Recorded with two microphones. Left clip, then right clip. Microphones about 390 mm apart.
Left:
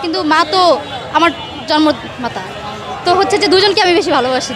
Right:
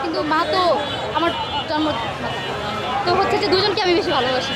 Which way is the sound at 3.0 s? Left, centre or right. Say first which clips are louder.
Left 8 dB; left.